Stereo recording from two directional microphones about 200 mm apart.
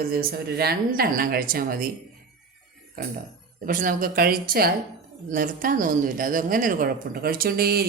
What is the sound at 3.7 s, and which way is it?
Speech, 45° right (ahead or behind).